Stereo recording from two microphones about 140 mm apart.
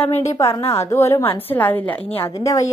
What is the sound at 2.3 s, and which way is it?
Speech, 25° left (ahead or behind).